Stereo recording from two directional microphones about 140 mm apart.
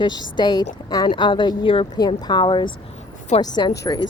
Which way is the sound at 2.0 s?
30° left (ahead or behind).